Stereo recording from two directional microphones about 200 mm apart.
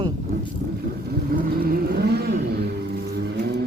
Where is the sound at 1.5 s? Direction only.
50° right (ahead or behind).